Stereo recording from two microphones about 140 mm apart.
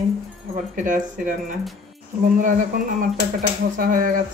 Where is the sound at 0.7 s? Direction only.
70° right (ahead or behind).